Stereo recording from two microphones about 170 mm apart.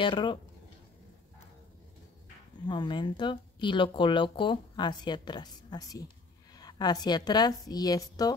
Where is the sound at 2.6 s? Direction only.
25° left (ahead or behind).